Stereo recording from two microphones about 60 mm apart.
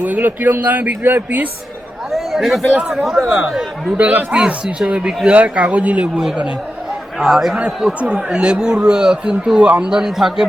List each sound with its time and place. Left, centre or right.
0.0 s speech: right
2.1 s speech: centre
3.9 s speech: right
7.2 s a man's voice: centre